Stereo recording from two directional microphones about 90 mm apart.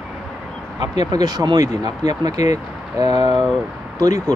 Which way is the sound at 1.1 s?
45° right (ahead or behind).